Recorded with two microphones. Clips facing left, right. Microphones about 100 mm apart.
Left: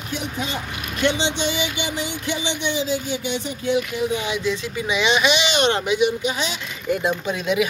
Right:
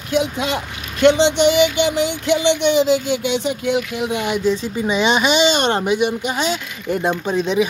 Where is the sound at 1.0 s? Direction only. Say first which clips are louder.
Right 9 dB; 65° right (ahead or behind).